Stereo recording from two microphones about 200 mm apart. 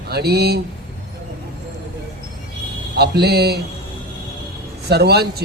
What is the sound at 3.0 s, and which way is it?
Speech, 55° right (ahead or behind).